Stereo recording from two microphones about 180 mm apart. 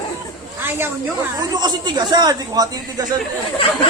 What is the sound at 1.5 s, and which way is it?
Speech, 25° right (ahead or behind).